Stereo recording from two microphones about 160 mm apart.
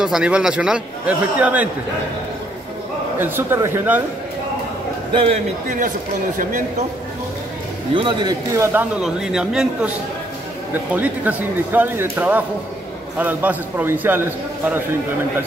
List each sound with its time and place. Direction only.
0.0 s speech: 5° right (ahead or behind)
3.2 s speech: 15° right (ahead or behind)
5.1 s a man's voice: 35° right (ahead or behind)
7.9 s a man's voice: 30° right (ahead or behind)
9.0 s a man's voice: 5° right (ahead or behind)